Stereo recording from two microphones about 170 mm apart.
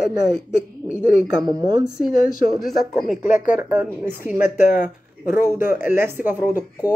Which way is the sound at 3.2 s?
50° left (ahead or behind).